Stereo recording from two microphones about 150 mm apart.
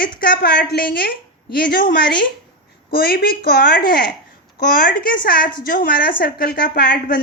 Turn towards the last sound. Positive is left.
turn(degrees=70)  # may be behind; listen again after turning